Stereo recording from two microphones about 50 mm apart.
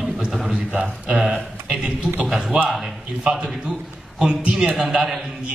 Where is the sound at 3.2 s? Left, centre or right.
Centre.